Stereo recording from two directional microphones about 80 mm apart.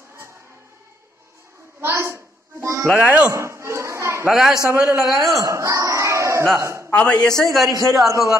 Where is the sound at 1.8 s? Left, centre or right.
Right.